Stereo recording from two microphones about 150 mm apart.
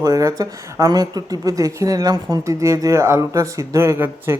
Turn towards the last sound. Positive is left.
turn(degrees=-15)  # may be behind; listen again after turning